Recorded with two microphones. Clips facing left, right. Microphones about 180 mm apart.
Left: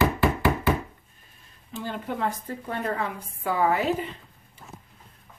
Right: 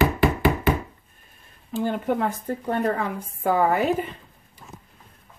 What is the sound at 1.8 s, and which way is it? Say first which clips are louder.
Speech: right 8 dB; 50° right (ahead or behind).